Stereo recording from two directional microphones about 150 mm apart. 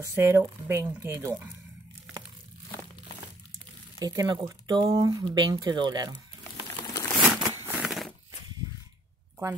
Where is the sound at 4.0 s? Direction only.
25° right (ahead or behind).